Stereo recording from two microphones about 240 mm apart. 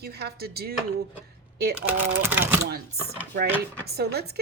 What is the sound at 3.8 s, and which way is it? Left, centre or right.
Speech, right.